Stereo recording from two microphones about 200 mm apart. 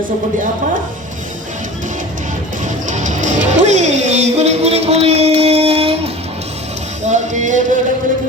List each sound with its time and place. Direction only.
2.8 s music: 40° right (ahead or behind)
7.0 s music: 35° right (ahead or behind)